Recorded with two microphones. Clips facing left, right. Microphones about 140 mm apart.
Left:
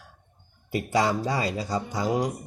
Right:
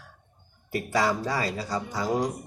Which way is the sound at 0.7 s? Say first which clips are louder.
Left 1 dB; 20° left (ahead or behind).